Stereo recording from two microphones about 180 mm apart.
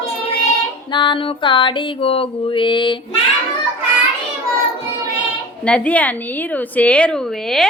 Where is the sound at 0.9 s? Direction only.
25° left (ahead or behind).